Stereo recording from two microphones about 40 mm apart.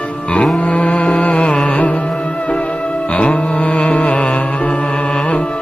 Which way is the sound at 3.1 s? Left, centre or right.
Left.